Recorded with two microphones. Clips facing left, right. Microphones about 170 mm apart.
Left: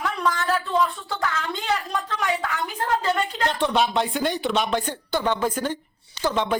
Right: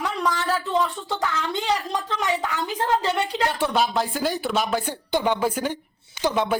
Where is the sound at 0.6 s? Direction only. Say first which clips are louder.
Even; 20° right (ahead or behind).